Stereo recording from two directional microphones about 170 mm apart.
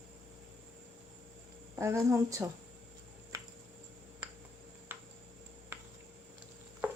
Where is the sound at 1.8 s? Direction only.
15° right (ahead or behind).